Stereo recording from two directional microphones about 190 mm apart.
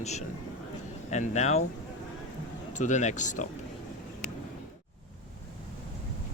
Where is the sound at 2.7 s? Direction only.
40° left (ahead or behind).